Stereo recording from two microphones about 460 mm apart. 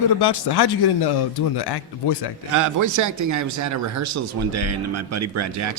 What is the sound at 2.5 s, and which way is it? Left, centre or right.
A man's voice, right.